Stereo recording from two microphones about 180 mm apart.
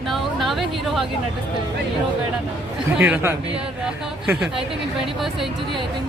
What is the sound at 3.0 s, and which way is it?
A woman's voice, 5° right (ahead or behind).